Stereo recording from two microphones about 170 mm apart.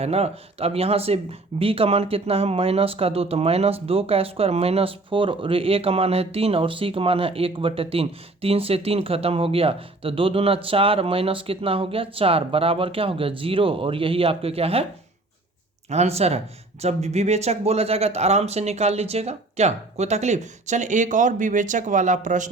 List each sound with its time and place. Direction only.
0.0 s speech: 40° right (ahead or behind)
15.9 s speech: 40° right (ahead or behind)